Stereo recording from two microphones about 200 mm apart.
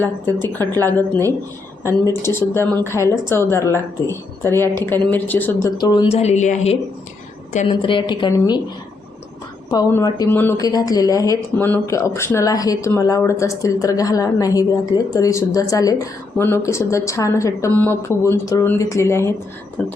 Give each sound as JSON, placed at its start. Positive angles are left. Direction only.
{"t": 0.0, "sound": "speech", "side_deg": 10}
{"t": 0.6, "sound": "speech", "side_deg": -20}
{"t": 0.9, "sound": "speech", "side_deg": 10}
{"t": 2.2, "sound": "speech", "side_deg": 10}
{"t": 5.7, "sound": "a woman's voice", "side_deg": 20}
{"t": 6.1, "sound": "a woman's voice", "side_deg": 30}
{"t": 9.6, "sound": "speech", "side_deg": 20}